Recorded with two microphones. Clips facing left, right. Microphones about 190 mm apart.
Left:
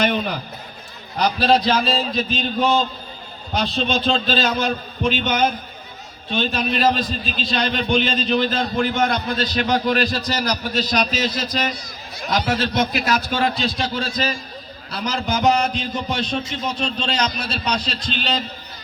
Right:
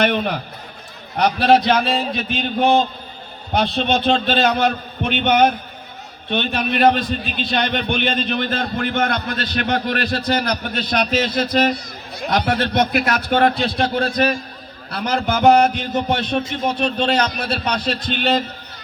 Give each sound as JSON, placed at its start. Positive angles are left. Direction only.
{"t": 0.0, "sound": "a man's voice", "side_deg": -60}